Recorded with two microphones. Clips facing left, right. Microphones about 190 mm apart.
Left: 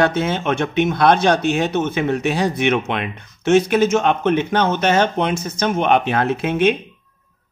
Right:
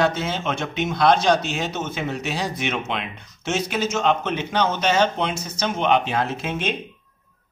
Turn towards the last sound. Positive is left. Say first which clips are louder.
# left 9 dB
turn(degrees=60)  # may be behind; listen again after turning